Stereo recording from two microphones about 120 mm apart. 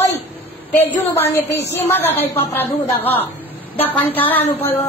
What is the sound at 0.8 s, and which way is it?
A woman's voice, 20° left (ahead or behind).